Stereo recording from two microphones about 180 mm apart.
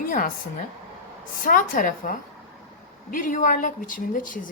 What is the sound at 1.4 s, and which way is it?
A woman's voice, 50° left (ahead or behind).